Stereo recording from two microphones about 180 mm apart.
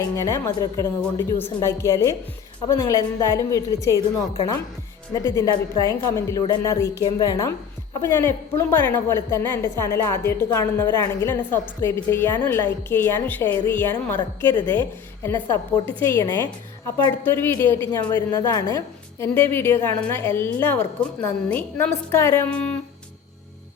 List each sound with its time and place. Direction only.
0.0 s a woman's voice: 20° left (ahead or behind)
5.1 s a woman's voice: 20° left (ahead or behind)
14.7 s a woman's voice: 10° left (ahead or behind)